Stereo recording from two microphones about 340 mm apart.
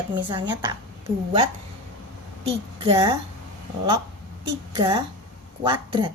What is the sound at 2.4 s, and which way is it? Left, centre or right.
Speech, centre.